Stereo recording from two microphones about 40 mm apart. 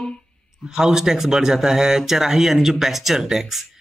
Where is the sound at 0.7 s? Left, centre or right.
Centre.